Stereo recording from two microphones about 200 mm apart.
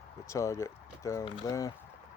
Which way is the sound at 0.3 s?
15° left (ahead or behind).